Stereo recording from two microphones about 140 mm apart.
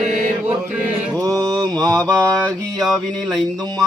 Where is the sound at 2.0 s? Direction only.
10° left (ahead or behind).